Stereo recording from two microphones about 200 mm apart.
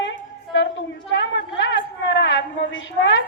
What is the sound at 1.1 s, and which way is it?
A woman's voice, 70° left (ahead or behind).